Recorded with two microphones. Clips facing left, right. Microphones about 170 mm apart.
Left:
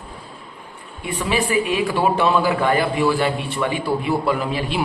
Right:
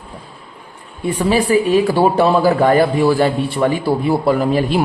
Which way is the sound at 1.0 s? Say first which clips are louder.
Right 6 dB; 40° right (ahead or behind).